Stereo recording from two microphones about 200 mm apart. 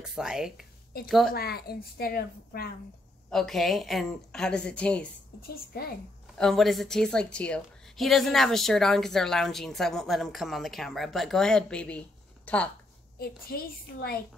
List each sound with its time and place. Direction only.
0.0 s a woman's voice: 5° right (ahead or behind)
1.3 s a woman's voice: 50° left (ahead or behind)
3.3 s a woman's voice: centre (ahead or behind)
5.5 s a woman's voice: 50° left (ahead or behind)
6.3 s a woman's voice: centre (ahead or behind)
13.2 s a woman's voice: 50° left (ahead or behind)